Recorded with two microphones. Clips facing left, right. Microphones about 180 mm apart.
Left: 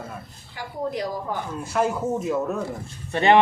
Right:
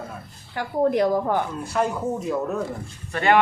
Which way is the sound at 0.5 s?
55° right (ahead or behind).